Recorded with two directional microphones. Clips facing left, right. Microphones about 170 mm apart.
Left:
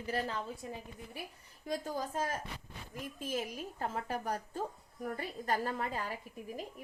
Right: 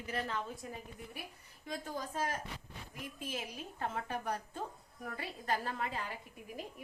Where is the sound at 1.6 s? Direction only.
40° left (ahead or behind).